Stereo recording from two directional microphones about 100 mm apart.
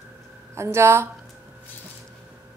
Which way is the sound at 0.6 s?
25° right (ahead or behind).